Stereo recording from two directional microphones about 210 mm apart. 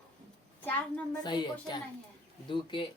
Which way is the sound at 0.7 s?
5° left (ahead or behind).